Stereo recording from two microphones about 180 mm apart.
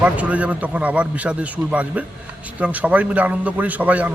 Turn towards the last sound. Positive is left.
turn(degrees=-10)  # may be behind; listen again after turning